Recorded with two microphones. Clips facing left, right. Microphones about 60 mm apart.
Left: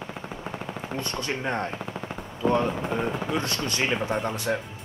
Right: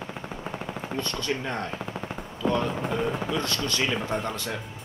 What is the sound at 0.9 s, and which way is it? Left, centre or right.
Speech, left.